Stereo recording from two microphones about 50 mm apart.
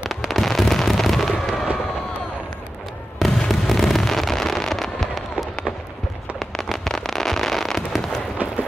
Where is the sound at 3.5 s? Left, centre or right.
Centre.